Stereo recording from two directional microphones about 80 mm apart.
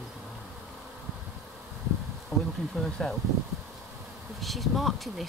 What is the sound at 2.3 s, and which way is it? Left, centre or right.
Bee, right.